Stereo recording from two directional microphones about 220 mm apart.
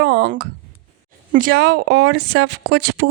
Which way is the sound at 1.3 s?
45° right (ahead or behind).